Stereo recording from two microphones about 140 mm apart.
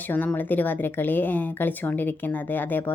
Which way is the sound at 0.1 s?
10° left (ahead or behind).